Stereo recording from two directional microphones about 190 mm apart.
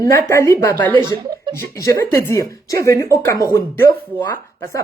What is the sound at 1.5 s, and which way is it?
Speech, 15° left (ahead or behind).